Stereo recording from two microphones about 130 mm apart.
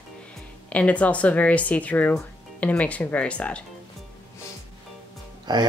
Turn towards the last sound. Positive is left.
turn(degrees=-35)  # may be behind; listen again after turning